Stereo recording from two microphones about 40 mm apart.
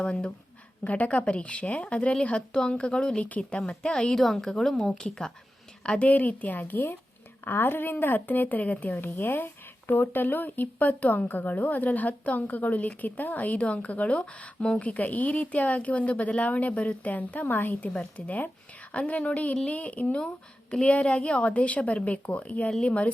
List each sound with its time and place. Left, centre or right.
0.0 s speech: left
0.9 s a woman's voice: left
3.2 s a woman's voice: left
3.7 s speech: left
4.2 s a woman's voice: centre; by 6.1 s left
6.1 s a woman's voice: left
7.4 s a woman's voice: left
17.4 s a woman's voice: left
18.3 s a woman's voice: left
20.1 s a woman's voice: left